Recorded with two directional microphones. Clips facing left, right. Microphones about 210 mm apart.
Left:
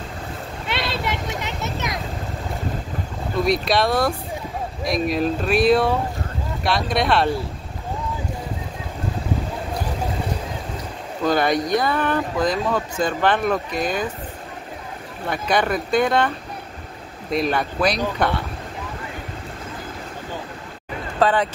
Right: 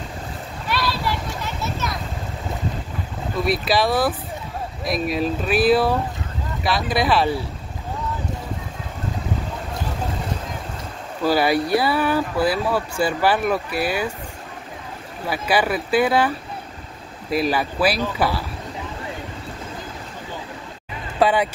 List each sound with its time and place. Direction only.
0.7 s a sound: 25° left (ahead or behind)
3.4 s speech: 5° right (ahead or behind)
11.2 s speech: 5° right (ahead or behind)
15.2 s speech: 5° right (ahead or behind)
21.2 s speech: 10° right (ahead or behind)